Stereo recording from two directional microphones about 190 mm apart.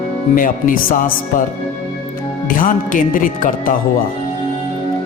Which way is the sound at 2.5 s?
45° left (ahead or behind).